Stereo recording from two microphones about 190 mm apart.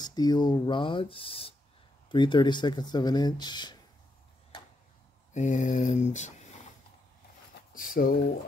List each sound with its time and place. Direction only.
0.0 s speech: 20° left (ahead or behind)
5.3 s a sound: 40° left (ahead or behind)
7.7 s speech: 50° left (ahead or behind)